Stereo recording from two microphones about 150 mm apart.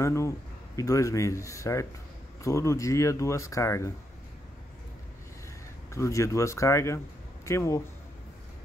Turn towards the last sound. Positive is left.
turn(degrees=20)  # may be behind; listen again after turning